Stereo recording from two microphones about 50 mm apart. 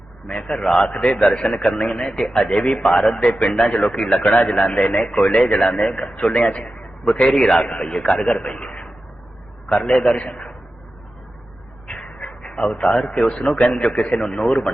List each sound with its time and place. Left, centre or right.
0.3 s a man's voice: left
11.9 s a man's voice: centre